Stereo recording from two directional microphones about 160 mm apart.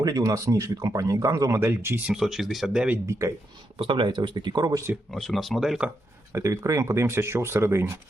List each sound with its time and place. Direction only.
0.0 s speech: 25° right (ahead or behind)
2.1 s speech: centre (ahead or behind)
3.1 s speech: 20° right (ahead or behind)
3.8 s speech: 30° right (ahead or behind)
5.1 s speech: centre (ahead or behind)
6.3 s speech: 20° right (ahead or behind)